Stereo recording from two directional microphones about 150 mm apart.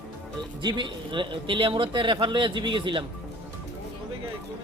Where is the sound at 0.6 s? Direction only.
35° right (ahead or behind).